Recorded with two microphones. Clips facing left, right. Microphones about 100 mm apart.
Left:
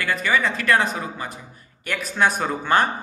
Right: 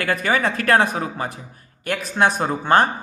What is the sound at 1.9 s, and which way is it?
Speech, 35° right (ahead or behind).